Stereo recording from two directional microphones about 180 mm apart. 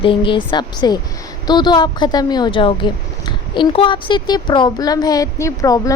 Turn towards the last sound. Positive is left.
turn(degrees=20)  # may be behind; listen again after turning